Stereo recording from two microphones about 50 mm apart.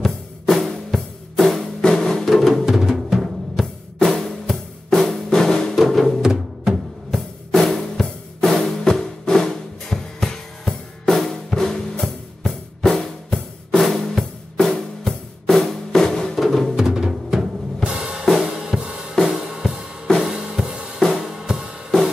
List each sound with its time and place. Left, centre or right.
0.0 s music: centre
2.6 s music: centre
3.5 s drum: centre
6.2 s music: centre
7.1 s drum kit: centre
16.8 s music: centre
17.8 s drum kit: centre
18.2 s drum kit: centre
21.0 s drum kit: centre
21.3 s drum: centre